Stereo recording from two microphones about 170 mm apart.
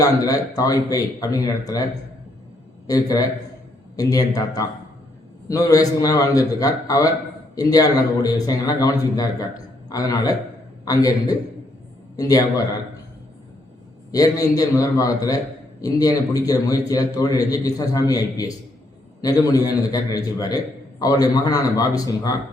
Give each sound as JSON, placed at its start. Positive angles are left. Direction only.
{"t": 0.0, "sound": "a man's voice", "side_deg": 20}
{"t": 14.1, "sound": "a man's voice", "side_deg": 20}